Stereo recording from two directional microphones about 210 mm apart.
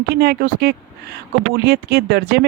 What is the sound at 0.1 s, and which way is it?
Speech, 50° right (ahead or behind).